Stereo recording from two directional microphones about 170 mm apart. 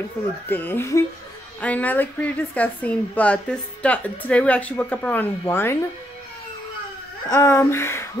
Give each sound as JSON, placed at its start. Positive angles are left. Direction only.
{"t": 0.5, "sound": "speech", "side_deg": 10}
{"t": 7.2, "sound": "speech", "side_deg": 15}